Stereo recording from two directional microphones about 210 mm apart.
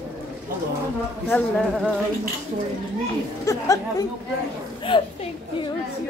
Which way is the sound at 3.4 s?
15° left (ahead or behind).